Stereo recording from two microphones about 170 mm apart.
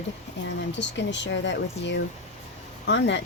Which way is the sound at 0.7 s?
90° left.